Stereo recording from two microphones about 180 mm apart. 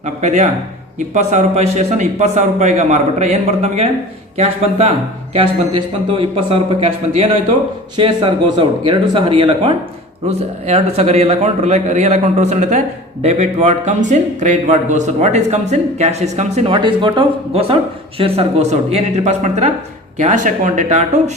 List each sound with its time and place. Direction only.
0.0 s a man's voice: 40° right (ahead or behind)